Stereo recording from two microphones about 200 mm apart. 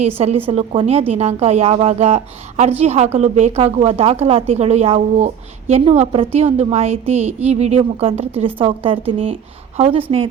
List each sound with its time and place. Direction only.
0.0 s a woman's voice: 30° right (ahead or behind)